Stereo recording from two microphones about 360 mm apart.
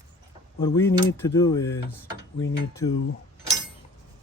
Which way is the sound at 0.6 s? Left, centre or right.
Centre.